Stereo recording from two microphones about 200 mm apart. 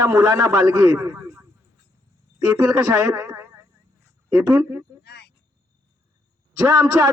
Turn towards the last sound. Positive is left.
turn(degrees=-15)  # may be behind; listen again after turning